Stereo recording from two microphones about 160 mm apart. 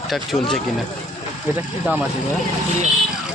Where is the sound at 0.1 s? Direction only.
Centre (ahead or behind).